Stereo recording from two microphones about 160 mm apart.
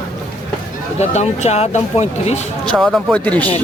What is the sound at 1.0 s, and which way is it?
Speech, 45° left (ahead or behind).